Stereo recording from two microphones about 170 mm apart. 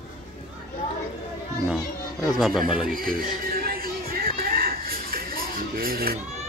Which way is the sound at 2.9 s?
55° right (ahead or behind).